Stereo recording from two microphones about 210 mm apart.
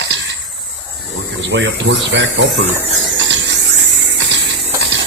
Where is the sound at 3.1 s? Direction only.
60° right (ahead or behind).